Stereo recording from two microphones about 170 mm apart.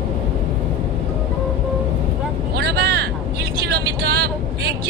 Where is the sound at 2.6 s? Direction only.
70° right (ahead or behind).